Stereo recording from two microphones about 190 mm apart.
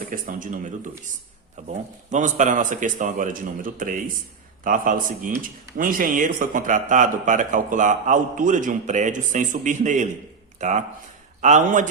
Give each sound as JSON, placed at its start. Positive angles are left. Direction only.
{"t": 0.1, "sound": "speech", "side_deg": -45}
{"t": 1.7, "sound": "speech", "side_deg": -40}